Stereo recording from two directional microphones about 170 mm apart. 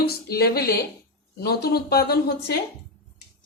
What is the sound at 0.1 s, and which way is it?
Speech, 65° left (ahead or behind).